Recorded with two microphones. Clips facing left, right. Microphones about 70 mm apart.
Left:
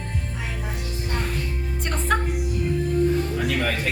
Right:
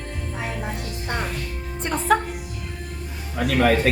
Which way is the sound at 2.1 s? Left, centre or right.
Centre.